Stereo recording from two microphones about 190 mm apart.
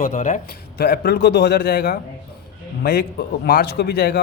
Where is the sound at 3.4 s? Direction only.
55° left (ahead or behind).